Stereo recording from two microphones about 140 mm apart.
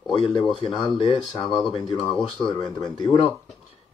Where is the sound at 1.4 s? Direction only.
Centre (ahead or behind).